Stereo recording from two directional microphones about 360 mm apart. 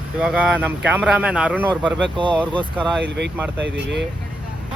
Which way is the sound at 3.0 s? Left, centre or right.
Right.